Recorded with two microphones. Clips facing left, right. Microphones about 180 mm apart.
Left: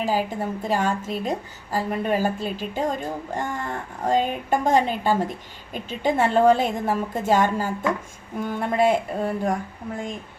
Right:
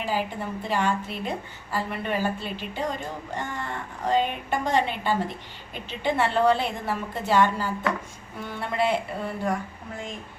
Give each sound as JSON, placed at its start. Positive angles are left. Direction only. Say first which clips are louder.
{"t": 0.0, "sound": "a woman's voice", "louder": "left 4 dB", "side_deg": 40}